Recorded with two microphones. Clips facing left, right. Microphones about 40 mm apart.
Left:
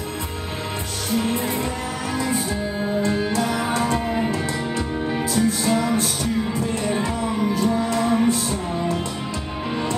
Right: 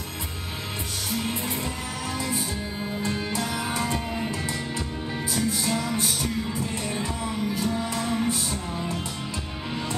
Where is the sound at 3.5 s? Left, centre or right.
Left.